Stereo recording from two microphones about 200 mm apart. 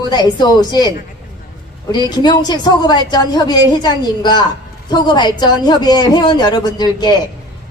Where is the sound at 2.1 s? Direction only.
20° left (ahead or behind).